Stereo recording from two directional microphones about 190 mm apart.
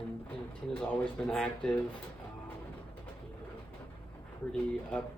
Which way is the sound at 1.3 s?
5° left (ahead or behind).